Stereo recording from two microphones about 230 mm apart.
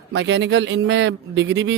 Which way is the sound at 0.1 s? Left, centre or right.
Right.